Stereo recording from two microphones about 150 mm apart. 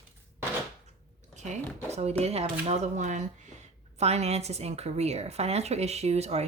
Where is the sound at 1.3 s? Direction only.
50° right (ahead or behind).